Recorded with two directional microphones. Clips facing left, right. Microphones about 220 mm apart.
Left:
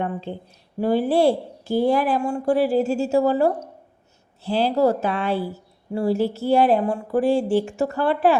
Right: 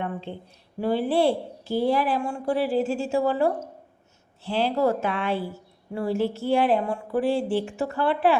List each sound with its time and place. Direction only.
0.0 s a woman's voice: 40° left (ahead or behind)